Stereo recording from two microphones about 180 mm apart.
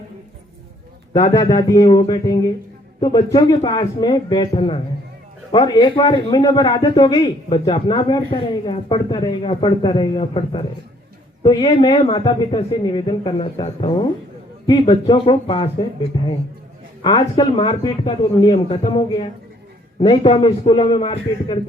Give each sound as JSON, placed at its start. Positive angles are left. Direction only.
{"t": 1.1, "sound": "a man's voice", "side_deg": 20}